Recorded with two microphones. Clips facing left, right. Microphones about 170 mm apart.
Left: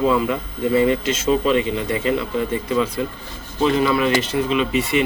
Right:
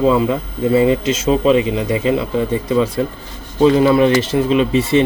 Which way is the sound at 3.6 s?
30° right (ahead or behind).